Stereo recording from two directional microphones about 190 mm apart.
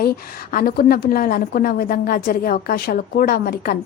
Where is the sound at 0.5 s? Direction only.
50° left (ahead or behind).